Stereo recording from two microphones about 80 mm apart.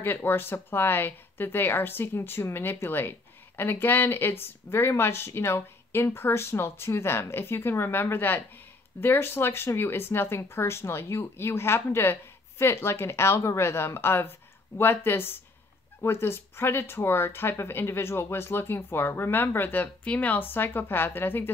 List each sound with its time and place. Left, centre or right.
0.0 s speech: left